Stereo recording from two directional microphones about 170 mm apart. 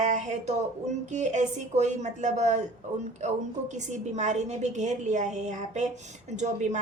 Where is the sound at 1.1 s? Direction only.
45° right (ahead or behind).